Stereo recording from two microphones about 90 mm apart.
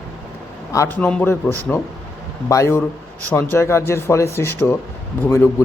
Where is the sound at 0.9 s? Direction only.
15° left (ahead or behind).